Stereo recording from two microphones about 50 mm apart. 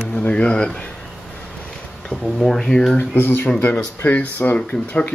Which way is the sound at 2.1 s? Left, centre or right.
Centre.